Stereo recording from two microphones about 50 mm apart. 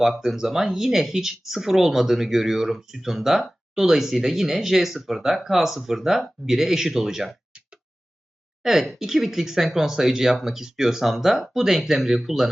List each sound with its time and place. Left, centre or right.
0.0 s speech: centre
7.5 s a sound: right
8.6 s speech: centre